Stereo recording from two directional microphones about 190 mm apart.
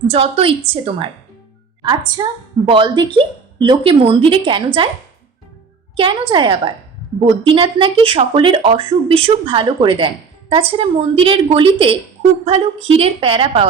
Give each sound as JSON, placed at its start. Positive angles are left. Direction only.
{"t": 0.1, "sound": "speech", "side_deg": -30}
{"t": 6.0, "sound": "speech", "side_deg": -25}